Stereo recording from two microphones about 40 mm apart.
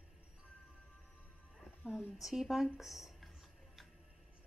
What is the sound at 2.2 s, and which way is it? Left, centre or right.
A woman's voice, centre.